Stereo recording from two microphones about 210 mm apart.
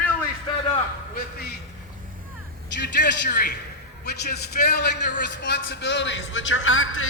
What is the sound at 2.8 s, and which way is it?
A man's voice, 55° left (ahead or behind).